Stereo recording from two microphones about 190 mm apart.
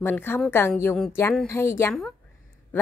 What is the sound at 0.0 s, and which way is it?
A woman's voice, 10° left (ahead or behind).